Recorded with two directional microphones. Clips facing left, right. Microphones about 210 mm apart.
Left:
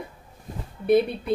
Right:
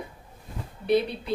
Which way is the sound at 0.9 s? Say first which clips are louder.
Left 4 dB; 50° left (ahead or behind).